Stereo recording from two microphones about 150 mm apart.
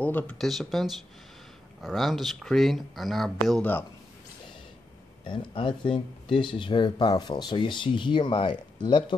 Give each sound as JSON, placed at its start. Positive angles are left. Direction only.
{"t": 0.0, "sound": "speech", "side_deg": 10}
{"t": 5.2, "sound": "speech", "side_deg": 30}